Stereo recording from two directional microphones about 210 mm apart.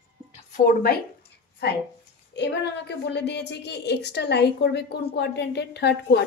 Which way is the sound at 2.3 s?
55° left (ahead or behind).